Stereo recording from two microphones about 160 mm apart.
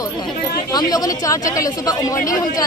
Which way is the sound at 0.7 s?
25° left (ahead or behind).